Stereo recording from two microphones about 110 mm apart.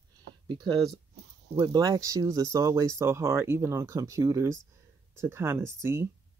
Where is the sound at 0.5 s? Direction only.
40° right (ahead or behind); by 6.0 s 20° right (ahead or behind).